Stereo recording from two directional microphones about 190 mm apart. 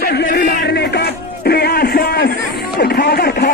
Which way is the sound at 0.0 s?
60° left (ahead or behind).